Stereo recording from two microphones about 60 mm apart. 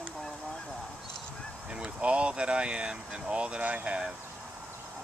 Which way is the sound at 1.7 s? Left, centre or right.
Centre.